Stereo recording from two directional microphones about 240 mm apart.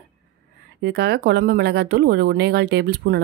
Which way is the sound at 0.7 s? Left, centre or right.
Right.